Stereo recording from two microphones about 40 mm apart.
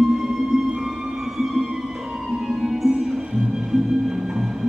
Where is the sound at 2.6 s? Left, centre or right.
Centre.